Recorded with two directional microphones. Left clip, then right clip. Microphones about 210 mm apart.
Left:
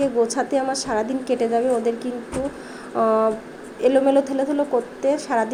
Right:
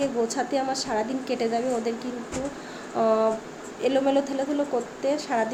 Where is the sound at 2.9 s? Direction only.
10° left (ahead or behind).